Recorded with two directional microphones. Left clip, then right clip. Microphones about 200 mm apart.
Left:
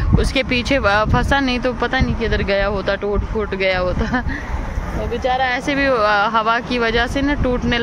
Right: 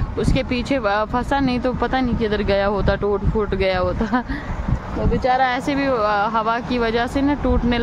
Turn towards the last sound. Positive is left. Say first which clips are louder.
# left 2 dB
turn(degrees=-10)  # may be behind; listen again after turning